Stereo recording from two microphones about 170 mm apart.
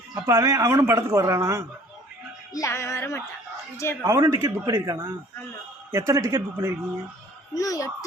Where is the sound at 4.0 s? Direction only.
15° right (ahead or behind).